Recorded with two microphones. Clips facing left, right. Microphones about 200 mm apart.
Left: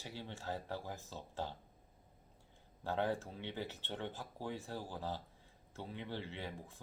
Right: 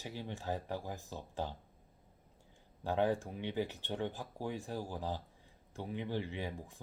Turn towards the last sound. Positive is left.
turn(degrees=-15)  # may be behind; listen again after turning